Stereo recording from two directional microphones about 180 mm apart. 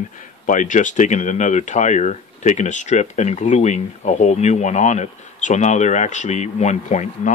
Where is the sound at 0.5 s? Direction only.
45° left (ahead or behind).